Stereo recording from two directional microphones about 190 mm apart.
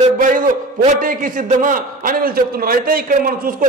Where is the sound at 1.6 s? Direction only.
45° right (ahead or behind).